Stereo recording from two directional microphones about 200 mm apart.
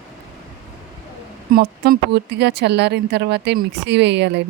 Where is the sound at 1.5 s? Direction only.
50° right (ahead or behind).